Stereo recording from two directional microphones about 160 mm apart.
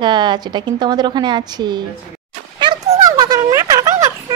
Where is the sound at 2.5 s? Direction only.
30° right (ahead or behind).